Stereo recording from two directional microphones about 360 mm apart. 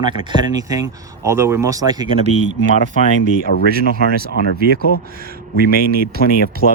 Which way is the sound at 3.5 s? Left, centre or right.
Left.